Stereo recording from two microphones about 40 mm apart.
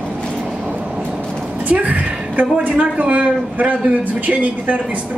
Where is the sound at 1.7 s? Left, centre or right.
Right.